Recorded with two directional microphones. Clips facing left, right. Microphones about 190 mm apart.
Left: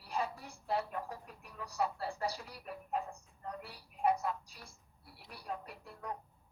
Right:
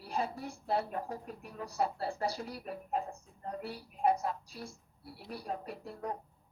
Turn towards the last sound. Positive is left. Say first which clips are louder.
# right 5 dB
turn(degrees=-35)  # may be behind; listen again after turning